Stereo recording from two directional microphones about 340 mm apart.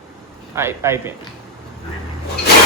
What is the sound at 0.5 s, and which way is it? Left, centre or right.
Speech, centre.